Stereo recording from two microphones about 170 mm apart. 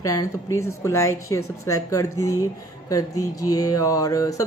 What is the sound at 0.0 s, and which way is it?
A woman's voice, 20° left (ahead or behind).